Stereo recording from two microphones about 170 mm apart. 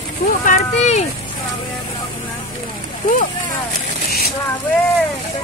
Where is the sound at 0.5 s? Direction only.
40° left (ahead or behind).